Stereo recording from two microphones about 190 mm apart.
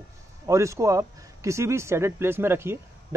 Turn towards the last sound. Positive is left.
turn(degrees=-15)  # may be behind; listen again after turning